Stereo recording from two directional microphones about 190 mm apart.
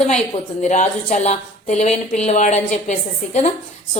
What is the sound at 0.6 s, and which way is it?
A woman's voice, 40° left (ahead or behind).